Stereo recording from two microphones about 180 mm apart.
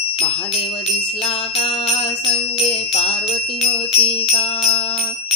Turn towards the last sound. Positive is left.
turn(degrees=30)  # may be behind; listen again after turning